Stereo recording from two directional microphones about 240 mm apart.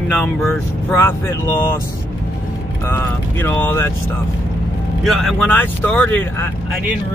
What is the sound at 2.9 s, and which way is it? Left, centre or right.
Speech, centre.